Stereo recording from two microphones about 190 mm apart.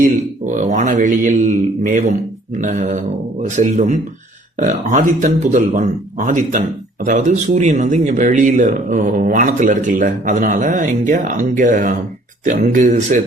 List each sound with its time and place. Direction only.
0.0 s speech: 40° right (ahead or behind)